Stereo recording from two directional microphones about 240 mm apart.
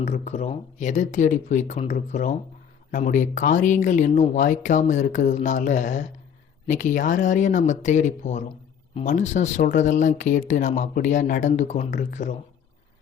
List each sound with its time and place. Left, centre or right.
0.0 s speech: left